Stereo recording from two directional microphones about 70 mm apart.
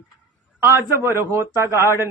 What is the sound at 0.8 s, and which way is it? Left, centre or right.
A man's voice, right.